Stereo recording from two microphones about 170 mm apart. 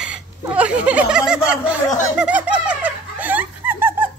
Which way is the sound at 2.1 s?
5° right (ahead or behind).